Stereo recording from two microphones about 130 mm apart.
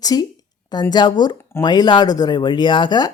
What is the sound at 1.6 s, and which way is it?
Speech, 35° left (ahead or behind).